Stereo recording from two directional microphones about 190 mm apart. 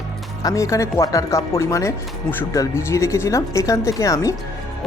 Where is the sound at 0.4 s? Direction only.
15° left (ahead or behind).